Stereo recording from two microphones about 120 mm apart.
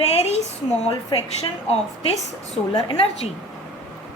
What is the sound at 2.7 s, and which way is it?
Speech, 35° left (ahead or behind).